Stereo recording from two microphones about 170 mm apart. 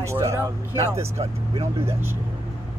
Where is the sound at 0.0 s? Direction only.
15° right (ahead or behind).